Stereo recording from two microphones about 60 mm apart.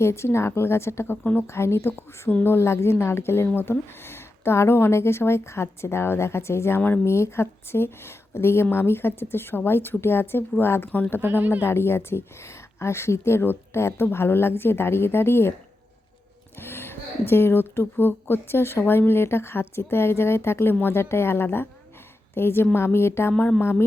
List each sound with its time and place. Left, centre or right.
0.0 s a woman's voice: left
11.2 s speech: right
11.6 s a woman's voice: left
16.6 s a woman's voice: left